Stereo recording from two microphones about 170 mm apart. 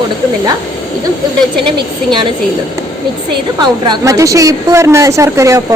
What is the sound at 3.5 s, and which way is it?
A woman's voice, 25° right (ahead or behind).